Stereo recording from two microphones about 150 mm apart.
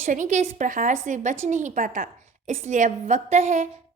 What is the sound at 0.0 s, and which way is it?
A woman's voice, 55° right (ahead or behind).